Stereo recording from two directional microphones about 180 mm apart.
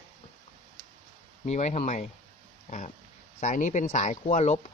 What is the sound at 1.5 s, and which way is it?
Speech, 40° left (ahead or behind).